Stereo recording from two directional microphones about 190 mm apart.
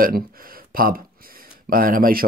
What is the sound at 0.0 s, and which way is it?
Speech, 50° right (ahead or behind).